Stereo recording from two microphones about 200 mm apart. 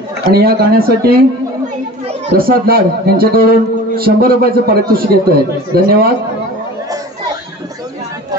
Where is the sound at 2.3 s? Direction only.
45° right (ahead or behind).